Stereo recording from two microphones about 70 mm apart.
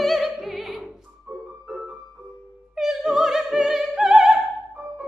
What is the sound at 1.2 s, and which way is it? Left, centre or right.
Music, centre.